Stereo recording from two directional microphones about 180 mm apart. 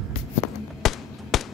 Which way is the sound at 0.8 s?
Centre (ahead or behind).